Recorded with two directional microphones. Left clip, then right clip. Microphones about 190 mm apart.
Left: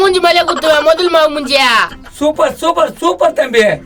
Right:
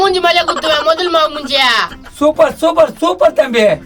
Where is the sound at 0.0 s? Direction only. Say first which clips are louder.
Left 1 dB; 40° left (ahead or behind).